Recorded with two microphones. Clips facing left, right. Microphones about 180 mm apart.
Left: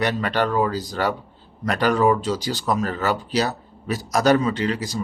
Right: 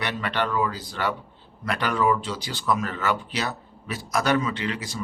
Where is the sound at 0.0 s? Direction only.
40° left (ahead or behind).